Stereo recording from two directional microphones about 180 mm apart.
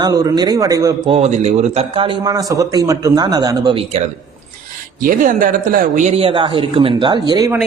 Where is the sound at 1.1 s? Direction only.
35° right (ahead or behind).